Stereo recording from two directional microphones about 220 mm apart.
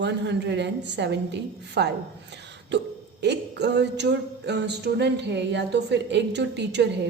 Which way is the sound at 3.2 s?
50° right (ahead or behind).